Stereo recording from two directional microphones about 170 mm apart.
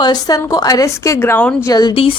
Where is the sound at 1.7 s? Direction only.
30° left (ahead or behind).